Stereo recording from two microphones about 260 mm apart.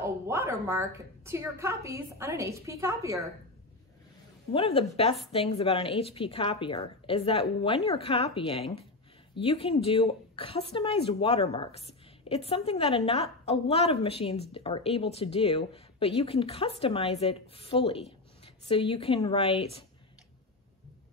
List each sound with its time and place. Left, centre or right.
0.0 s a woman's voice: centre
4.5 s a woman's voice: left